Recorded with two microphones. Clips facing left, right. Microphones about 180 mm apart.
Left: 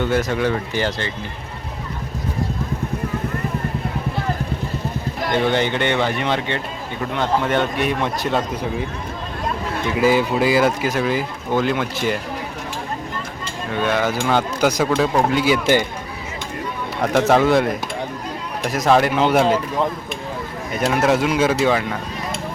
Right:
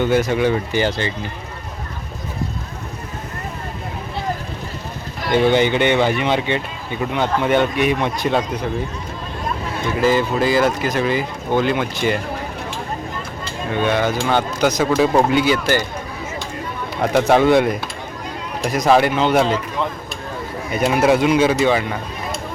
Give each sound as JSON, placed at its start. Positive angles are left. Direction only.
{"t": 0.0, "sound": "speech", "side_deg": 0}
{"t": 5.3, "sound": "speech", "side_deg": -5}
{"t": 10.0, "sound": "speech", "side_deg": 10}
{"t": 13.7, "sound": "speech", "side_deg": 0}
{"t": 14.8, "sound": "speech", "side_deg": -5}
{"t": 15.5, "sound": "speech", "side_deg": 20}
{"t": 17.2, "sound": "speech", "side_deg": 0}
{"t": 20.7, "sound": "speech", "side_deg": 0}